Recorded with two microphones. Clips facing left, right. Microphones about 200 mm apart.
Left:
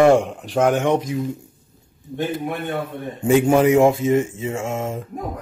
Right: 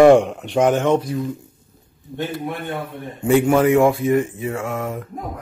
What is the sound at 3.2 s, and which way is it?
A man's voice, 20° left (ahead or behind).